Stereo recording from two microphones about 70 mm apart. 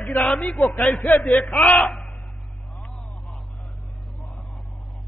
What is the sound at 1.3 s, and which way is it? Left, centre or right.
Speech, centre.